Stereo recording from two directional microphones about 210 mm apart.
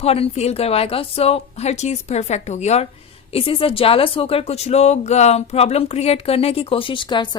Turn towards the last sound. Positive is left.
turn(degrees=20)  # may be behind; listen again after turning